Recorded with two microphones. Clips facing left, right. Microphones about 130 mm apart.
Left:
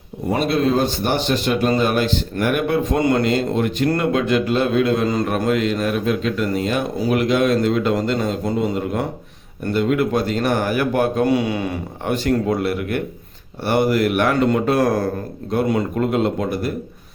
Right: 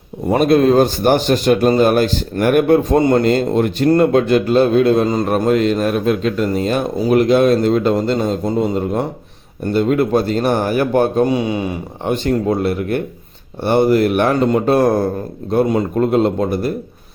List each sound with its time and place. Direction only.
0.3 s a man's voice: 50° right (ahead or behind); by 16.7 s 30° right (ahead or behind)